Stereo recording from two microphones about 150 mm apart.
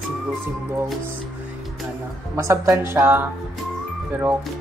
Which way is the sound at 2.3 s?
20° right (ahead or behind).